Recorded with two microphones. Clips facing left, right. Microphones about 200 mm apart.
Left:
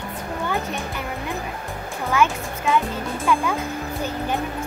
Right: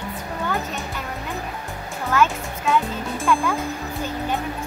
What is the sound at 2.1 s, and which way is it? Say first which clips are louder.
Music: even; centre (ahead or behind).